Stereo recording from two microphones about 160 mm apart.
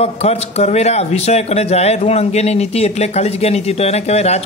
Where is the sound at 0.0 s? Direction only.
40° left (ahead or behind).